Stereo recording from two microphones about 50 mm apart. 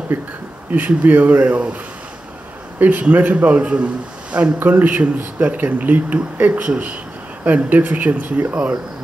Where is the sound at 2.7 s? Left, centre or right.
Right.